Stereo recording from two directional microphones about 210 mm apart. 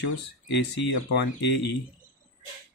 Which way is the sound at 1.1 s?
55° left (ahead or behind).